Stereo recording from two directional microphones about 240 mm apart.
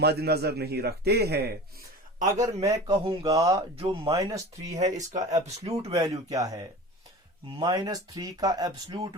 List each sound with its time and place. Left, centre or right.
0.0 s a man's voice: right
2.4 s speech: centre
5.4 s speech: right
5.9 s speech: centre